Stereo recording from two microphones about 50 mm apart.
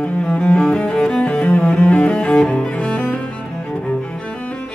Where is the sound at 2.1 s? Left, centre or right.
Centre.